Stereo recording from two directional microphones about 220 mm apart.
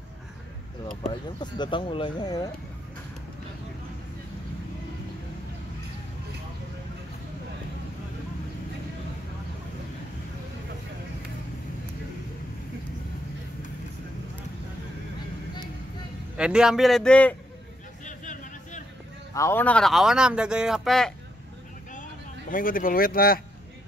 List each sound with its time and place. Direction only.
1.4 s speech: 20° left (ahead or behind)
16.3 s speech: 5° right (ahead or behind)
18.0 s vehicle: 35° left (ahead or behind)
19.3 s speech: 10° left (ahead or behind)
22.5 s speech: 40° left (ahead or behind)